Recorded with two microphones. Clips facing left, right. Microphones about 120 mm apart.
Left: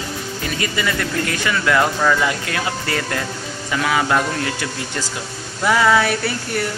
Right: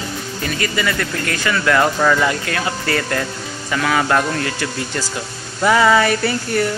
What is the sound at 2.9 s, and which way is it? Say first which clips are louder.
Speech: right 3 dB; 10° left (ahead or behind).